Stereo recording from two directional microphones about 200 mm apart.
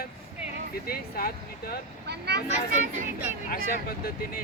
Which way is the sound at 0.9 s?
45° left (ahead or behind).